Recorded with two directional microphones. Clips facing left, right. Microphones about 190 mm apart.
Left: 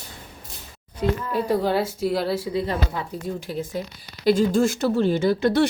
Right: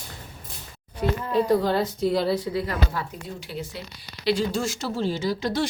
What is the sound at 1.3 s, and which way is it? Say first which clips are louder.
A woman's voice: right 2 dB; 10° left (ahead or behind).